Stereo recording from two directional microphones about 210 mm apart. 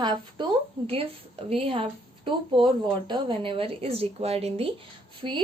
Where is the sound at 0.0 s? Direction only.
20° right (ahead or behind).